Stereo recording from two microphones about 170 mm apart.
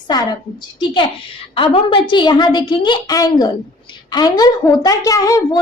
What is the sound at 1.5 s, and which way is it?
A woman's voice, 30° left (ahead or behind).